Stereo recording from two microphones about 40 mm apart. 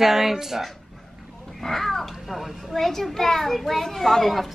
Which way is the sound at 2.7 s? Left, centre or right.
Centre.